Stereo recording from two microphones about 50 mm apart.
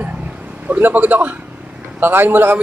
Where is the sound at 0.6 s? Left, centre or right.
Right.